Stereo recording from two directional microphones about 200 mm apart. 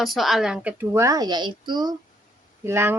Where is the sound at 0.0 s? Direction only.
Centre (ahead or behind).